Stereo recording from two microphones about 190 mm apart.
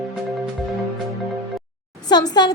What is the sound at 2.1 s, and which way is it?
Speech, 20° left (ahead or behind).